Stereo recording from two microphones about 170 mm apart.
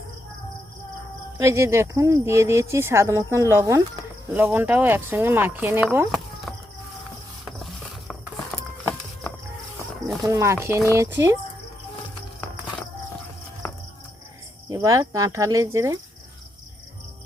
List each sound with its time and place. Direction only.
1.4 s speech: 15° right (ahead or behind)
10.2 s speech: 15° right (ahead or behind)
13.6 s a sound: 15° left (ahead or behind)
14.7 s speech: 15° right (ahead or behind)